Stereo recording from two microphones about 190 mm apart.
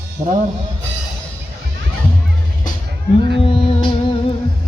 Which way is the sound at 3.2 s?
25° left (ahead or behind).